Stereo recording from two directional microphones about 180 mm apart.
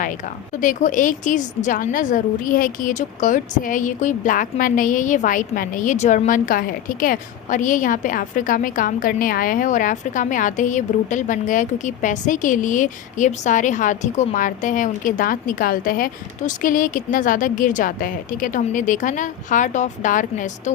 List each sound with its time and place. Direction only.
0.6 s a woman's voice: 45° left (ahead or behind)